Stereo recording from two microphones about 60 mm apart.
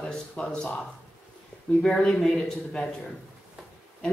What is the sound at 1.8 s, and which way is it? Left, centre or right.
Speech, centre.